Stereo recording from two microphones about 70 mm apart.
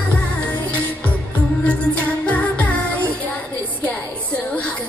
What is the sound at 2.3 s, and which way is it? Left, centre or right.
Music, left.